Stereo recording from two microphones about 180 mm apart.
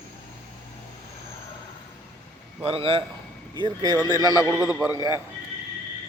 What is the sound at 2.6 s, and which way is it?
A man's voice, 30° right (ahead or behind).